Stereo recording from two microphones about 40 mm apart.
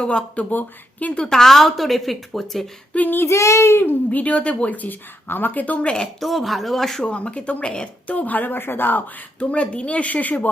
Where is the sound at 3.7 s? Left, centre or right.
Left.